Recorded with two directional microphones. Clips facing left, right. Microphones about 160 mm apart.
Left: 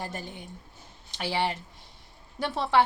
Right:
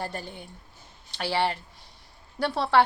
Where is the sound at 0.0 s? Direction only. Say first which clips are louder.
Right 2 dB; 15° left (ahead or behind).